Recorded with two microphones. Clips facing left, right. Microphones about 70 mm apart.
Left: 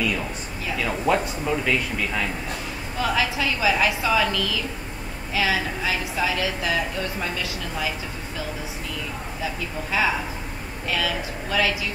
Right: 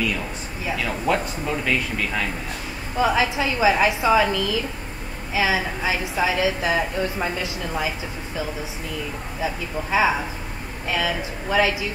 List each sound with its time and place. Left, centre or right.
0.8 s a man's voice: centre
3.0 s a woman's voice: right
9.4 s a woman's voice: right